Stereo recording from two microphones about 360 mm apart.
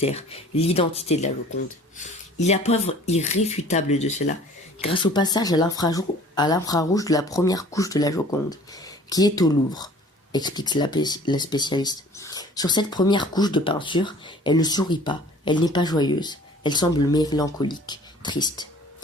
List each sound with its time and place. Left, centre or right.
0.0 s speech: centre